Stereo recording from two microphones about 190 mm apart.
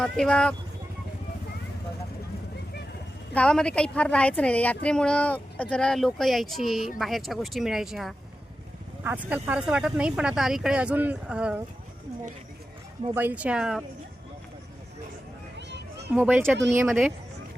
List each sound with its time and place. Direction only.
0.0 s a woman's voice: 5° left (ahead or behind)
3.3 s a woman's voice: 5° left (ahead or behind)
13.1 s speech: 10° right (ahead or behind)
16.1 s a woman's voice: 10° right (ahead or behind)